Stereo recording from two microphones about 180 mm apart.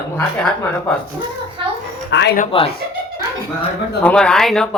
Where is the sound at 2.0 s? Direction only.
70° left (ahead or behind).